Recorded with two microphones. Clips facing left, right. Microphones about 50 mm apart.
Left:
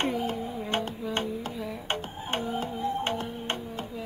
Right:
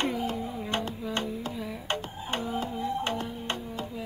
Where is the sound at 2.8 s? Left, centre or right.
Left.